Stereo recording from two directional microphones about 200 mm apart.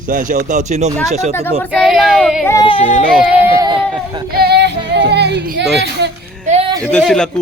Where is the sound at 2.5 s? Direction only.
20° left (ahead or behind).